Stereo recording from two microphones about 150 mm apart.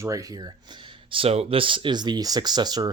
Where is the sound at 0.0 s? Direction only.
20° right (ahead or behind).